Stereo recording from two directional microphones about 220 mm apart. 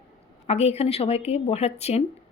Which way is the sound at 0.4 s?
30° left (ahead or behind).